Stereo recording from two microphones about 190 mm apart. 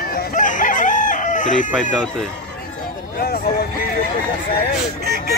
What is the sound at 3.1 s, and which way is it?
Speech, 55° left (ahead or behind).